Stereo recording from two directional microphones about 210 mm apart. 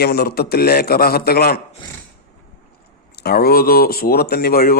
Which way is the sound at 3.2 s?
45° left (ahead or behind).